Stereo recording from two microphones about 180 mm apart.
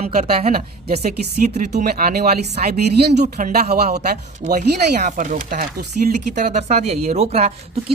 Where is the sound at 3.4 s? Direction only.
60° right (ahead or behind).